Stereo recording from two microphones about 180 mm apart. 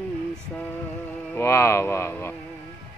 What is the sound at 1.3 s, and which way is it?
Speech, 15° left (ahead or behind).